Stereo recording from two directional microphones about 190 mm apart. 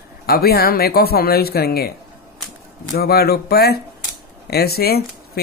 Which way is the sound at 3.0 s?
55° left (ahead or behind).